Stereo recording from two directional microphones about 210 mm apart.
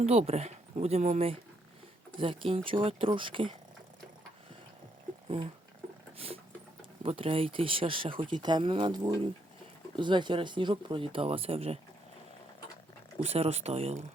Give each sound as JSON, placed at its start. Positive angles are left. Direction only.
{"t": 0.0, "sound": "speech", "side_deg": -30}
{"t": 6.1, "sound": "speech", "side_deg": -25}
{"t": 13.2, "sound": "speech", "side_deg": -30}